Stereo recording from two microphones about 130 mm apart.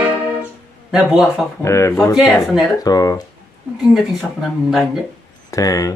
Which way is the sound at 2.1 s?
5° right (ahead or behind).